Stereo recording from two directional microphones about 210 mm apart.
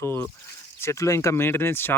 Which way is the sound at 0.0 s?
10° left (ahead or behind).